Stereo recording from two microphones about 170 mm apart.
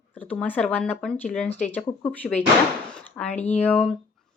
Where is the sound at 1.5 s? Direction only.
45° left (ahead or behind).